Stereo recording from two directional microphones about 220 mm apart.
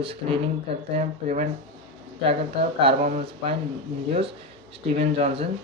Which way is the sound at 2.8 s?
25° right (ahead or behind).